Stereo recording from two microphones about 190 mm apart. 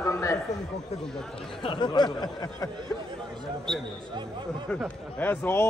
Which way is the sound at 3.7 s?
5° left (ahead or behind).